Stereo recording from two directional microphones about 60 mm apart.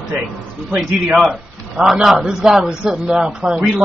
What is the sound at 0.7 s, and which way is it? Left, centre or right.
Speech, right.